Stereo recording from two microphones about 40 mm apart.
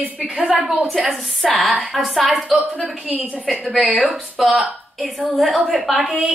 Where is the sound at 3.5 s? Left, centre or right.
Centre.